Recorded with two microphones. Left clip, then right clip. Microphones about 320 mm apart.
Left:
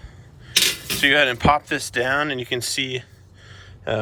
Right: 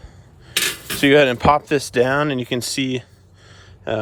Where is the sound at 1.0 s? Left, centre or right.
Centre.